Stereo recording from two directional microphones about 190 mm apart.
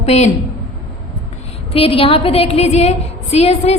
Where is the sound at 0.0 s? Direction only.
35° left (ahead or behind).